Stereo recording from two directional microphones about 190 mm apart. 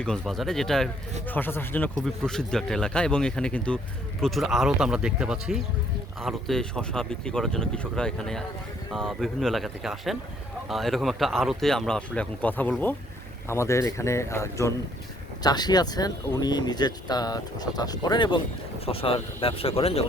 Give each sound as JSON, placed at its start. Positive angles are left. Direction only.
{"t": 0.0, "sound": "speech", "side_deg": 0}